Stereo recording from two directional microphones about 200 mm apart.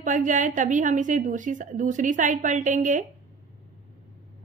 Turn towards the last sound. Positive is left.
turn(degrees=-40)  # may be behind; listen again after turning